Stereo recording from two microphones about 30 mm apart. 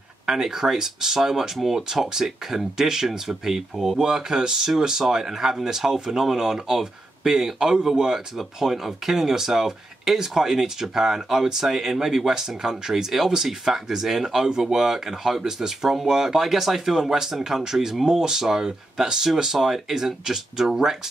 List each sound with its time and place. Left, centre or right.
0.3 s speech: centre